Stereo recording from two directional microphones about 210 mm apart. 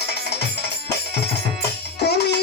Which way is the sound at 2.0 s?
50° left (ahead or behind).